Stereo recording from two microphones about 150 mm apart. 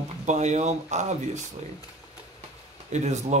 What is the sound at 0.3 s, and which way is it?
Speech, 50° right (ahead or behind).